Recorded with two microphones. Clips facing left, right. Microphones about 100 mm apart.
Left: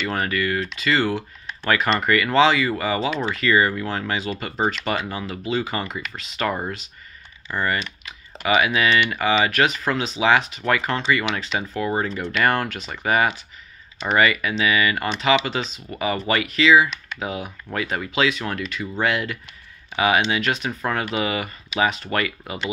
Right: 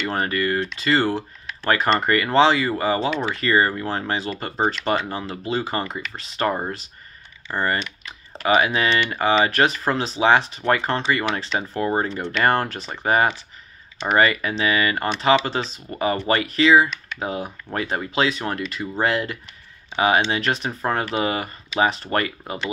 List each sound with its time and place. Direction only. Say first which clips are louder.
0.0 s speech: right 1 dB; 30° right (ahead or behind)